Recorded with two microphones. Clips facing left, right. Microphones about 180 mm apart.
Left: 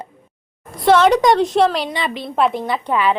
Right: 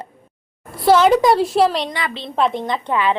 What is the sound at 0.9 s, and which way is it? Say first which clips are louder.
A woman's voice: even; 5° right (ahead or behind).